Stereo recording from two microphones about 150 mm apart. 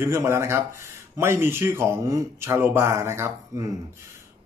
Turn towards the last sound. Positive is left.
turn(degrees=-20)  # may be behind; listen again after turning